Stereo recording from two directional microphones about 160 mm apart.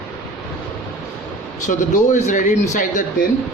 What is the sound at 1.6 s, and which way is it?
Speech, 50° left (ahead or behind).